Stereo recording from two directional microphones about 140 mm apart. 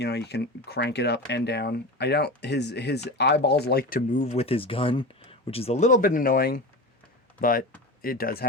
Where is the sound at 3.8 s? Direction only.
80° left.